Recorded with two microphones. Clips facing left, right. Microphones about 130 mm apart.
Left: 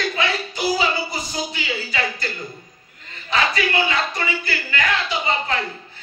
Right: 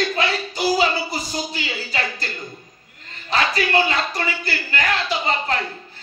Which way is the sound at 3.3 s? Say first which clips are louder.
Right 1 dB; 35° right (ahead or behind).